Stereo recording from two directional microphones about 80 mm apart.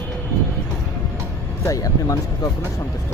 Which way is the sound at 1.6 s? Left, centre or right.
Left.